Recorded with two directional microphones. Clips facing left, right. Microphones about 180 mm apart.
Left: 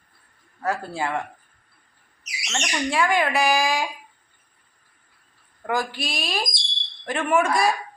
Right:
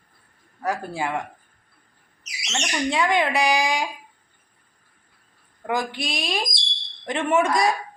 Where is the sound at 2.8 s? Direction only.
20° right (ahead or behind).